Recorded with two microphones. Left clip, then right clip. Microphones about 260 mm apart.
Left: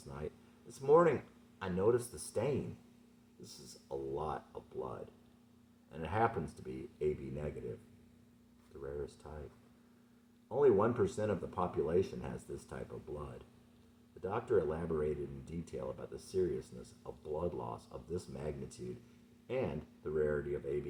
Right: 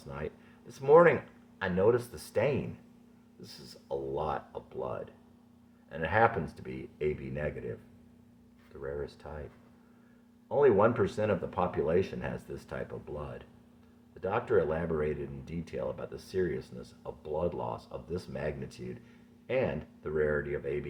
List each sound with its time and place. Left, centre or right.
0.8 s speech: right
8.8 s speech: right
10.5 s speech: right